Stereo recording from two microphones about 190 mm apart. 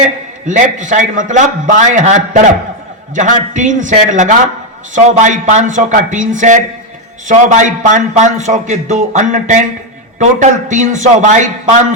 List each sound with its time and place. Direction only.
0.4 s a man's voice: 40° right (ahead or behind)